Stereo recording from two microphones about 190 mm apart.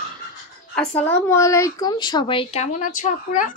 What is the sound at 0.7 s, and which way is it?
A woman's voice, 10° left (ahead or behind).